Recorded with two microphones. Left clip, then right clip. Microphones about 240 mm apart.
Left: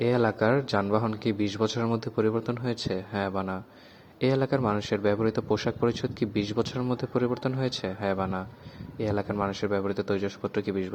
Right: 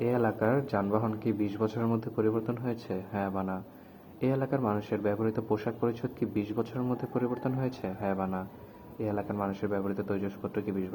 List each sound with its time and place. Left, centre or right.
0.0 s speech: left